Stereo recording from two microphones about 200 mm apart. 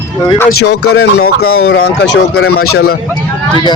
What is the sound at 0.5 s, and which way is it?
Speech, 55° left (ahead or behind).